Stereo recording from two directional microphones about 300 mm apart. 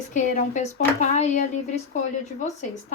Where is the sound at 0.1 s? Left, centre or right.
Left.